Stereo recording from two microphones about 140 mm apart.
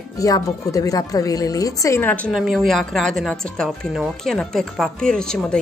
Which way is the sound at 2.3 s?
5° right (ahead or behind).